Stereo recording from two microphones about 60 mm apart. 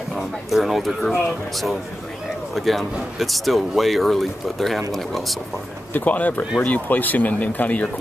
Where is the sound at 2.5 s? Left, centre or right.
Centre.